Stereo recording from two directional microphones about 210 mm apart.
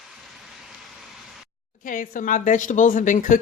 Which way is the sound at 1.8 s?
40° left (ahead or behind).